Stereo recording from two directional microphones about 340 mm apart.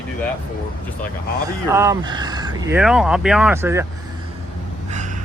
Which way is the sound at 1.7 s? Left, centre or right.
Centre.